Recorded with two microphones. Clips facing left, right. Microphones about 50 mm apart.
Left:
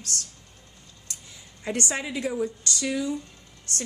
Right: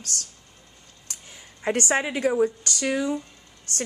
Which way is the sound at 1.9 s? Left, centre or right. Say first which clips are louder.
Right 6 dB; right.